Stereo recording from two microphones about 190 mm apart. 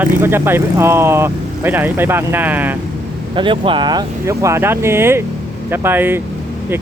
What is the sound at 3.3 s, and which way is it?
Speech, 25° right (ahead or behind).